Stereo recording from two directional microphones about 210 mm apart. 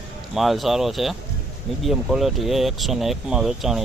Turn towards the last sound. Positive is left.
turn(degrees=0)  # may be behind; listen again after turning